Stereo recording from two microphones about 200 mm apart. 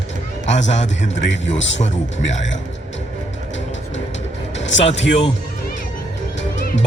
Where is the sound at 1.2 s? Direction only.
65° left (ahead or behind).